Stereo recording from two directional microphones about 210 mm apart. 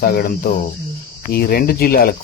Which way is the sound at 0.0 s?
45° left (ahead or behind).